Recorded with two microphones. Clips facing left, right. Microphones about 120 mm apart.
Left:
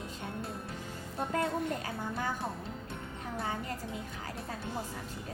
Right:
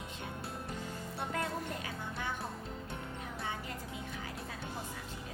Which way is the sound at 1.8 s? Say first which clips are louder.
Left 5 dB; 40° left (ahead or behind).